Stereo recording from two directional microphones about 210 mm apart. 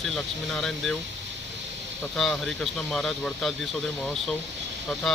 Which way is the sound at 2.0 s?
Centre (ahead or behind).